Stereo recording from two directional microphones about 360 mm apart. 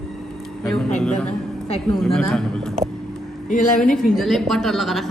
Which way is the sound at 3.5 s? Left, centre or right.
Left.